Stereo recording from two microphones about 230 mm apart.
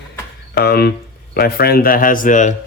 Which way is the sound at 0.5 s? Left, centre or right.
Left.